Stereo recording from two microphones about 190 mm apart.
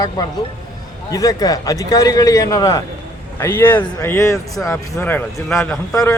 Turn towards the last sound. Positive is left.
turn(degrees=15)  # may be behind; listen again after turning